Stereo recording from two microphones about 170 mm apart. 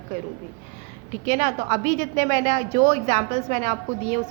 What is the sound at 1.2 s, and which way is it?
A woman's voice, 40° right (ahead or behind).